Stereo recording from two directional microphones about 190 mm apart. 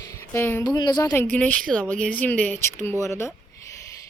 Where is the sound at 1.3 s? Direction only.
5° left (ahead or behind).